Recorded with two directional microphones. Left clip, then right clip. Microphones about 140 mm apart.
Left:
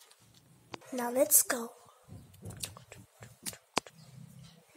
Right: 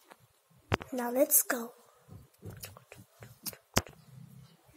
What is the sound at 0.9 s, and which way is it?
Speech, 10° right (ahead or behind).